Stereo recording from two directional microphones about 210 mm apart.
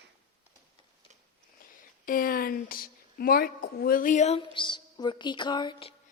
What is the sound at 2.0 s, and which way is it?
A woman's voice, 40° left (ahead or behind).